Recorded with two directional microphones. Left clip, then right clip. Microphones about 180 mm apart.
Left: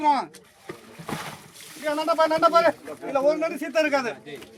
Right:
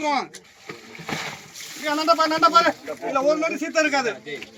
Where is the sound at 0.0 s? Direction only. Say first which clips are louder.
Left 2 dB; 35° left (ahead or behind).